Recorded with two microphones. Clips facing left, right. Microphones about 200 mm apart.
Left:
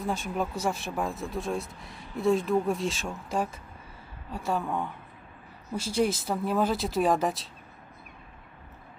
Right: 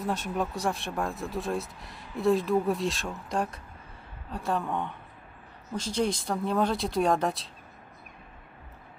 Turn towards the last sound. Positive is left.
turn(degrees=0)  # may be behind; listen again after turning